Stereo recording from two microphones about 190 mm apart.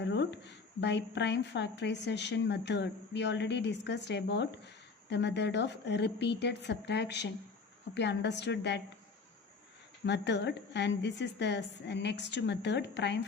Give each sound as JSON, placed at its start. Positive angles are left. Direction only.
{"t": 0.0, "sound": "a woman's voice", "side_deg": 65}
{"t": 10.1, "sound": "a woman's voice", "side_deg": 65}